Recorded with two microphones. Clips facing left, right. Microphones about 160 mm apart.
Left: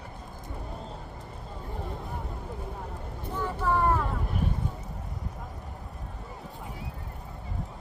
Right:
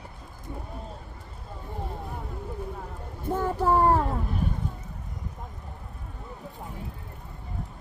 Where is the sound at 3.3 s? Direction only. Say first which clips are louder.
Right 5 dB; 45° right (ahead or behind).